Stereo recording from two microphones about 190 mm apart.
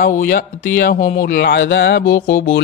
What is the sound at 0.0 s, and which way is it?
Speech, 50° left (ahead or behind).